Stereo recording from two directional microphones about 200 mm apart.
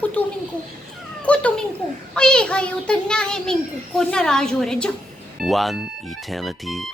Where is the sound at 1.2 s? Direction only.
5° left (ahead or behind).